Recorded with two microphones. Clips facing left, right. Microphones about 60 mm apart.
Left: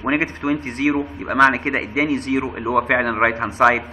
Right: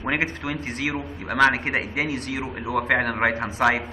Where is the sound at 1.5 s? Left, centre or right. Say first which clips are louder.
Left 3 dB; left.